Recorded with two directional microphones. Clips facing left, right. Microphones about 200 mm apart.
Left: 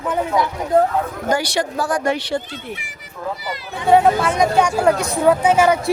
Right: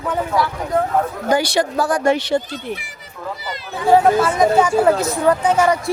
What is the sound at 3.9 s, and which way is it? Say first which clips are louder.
Speech: right 1 dB; centre (ahead or behind).